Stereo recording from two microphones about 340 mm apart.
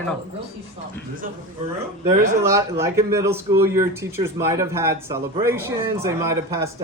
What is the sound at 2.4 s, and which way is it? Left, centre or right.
A man's voice, centre.